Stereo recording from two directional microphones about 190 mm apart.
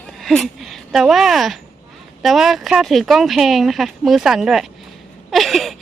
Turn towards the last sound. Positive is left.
turn(degrees=0)  # may be behind; listen again after turning